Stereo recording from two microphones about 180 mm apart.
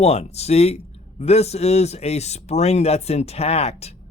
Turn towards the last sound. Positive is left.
turn(degrees=35)  # may be behind; listen again after turning